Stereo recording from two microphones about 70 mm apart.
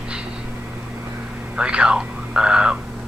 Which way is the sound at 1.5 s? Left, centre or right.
Centre.